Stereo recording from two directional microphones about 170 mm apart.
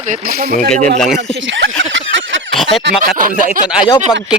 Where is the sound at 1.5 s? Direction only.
90° right.